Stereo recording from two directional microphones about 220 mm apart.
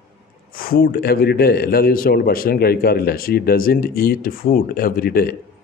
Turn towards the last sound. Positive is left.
turn(degrees=45)  # may be behind; listen again after turning